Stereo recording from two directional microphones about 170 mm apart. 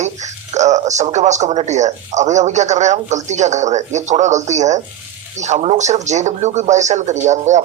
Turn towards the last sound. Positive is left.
turn(degrees=-45)  # may be behind; listen again after turning